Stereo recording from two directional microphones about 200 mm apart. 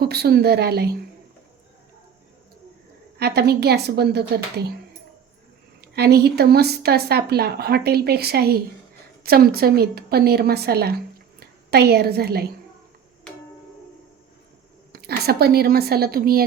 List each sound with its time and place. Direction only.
0.0 s speech: 50° right (ahead or behind)
3.2 s a woman's voice: 55° right (ahead or behind)
5.8 s a woman's voice: 55° right (ahead or behind)
14.9 s speech: 50° right (ahead or behind)